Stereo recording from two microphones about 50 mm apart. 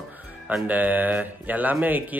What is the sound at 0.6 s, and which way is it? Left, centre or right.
Speech, right.